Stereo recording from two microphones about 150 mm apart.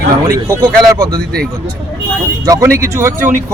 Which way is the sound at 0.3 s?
25° right (ahead or behind).